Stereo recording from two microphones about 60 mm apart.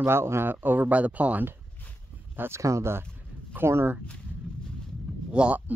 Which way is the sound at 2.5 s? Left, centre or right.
Right.